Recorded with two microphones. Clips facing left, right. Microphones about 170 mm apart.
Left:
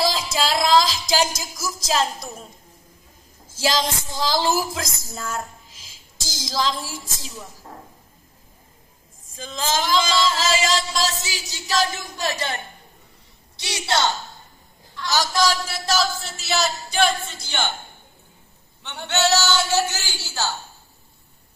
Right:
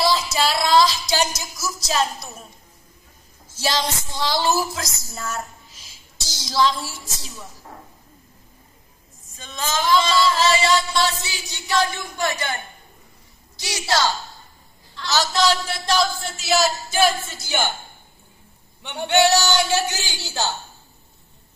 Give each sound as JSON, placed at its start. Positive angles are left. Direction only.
{"t": 0.1, "sound": "music", "side_deg": 90}
{"t": 3.5, "sound": "music", "side_deg": 90}
{"t": 5.7, "sound": "a sound", "side_deg": 90}
{"t": 6.9, "sound": "music", "side_deg": 90}
{"t": 9.5, "sound": "music", "side_deg": 90}
{"t": 11.3, "sound": "music", "side_deg": 40}
{"t": 13.6, "sound": "a woman's voice", "side_deg": 25}
{"t": 15.0, "sound": "a man's voice", "side_deg": 10}
{"t": 18.8, "sound": "a man's voice", "side_deg": -15}